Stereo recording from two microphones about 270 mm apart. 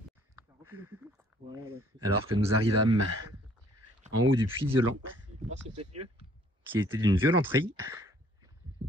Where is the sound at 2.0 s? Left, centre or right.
Right.